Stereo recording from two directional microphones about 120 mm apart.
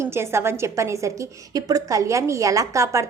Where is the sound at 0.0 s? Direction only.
20° right (ahead or behind).